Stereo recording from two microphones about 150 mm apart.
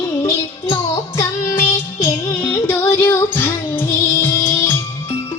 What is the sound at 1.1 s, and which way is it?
Music, 20° left (ahead or behind).